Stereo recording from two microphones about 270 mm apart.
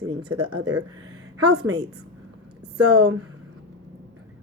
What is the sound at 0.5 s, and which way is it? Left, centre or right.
A woman's voice, right.